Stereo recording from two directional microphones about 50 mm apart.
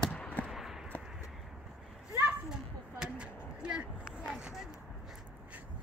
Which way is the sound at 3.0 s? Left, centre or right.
Right.